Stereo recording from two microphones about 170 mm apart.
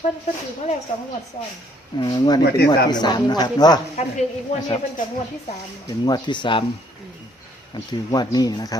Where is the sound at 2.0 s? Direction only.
25° left (ahead or behind).